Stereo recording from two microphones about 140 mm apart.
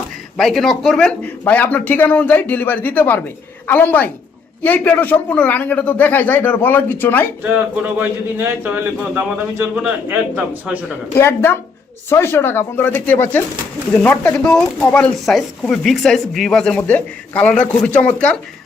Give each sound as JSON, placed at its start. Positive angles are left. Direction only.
{"t": 0.3, "sound": "a man's voice", "side_deg": 0}
{"t": 7.4, "sound": "speech", "side_deg": -15}
{"t": 11.1, "sound": "a man's voice", "side_deg": 20}